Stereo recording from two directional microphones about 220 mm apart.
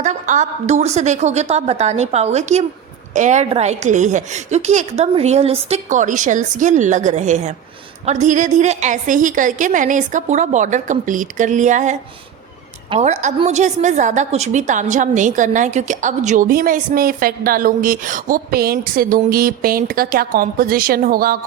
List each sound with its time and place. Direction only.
0.0 s a woman's voice: 35° right (ahead or behind)